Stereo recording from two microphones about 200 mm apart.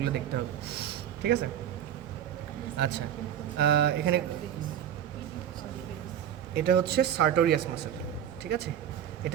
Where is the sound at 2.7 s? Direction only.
55° right (ahead or behind).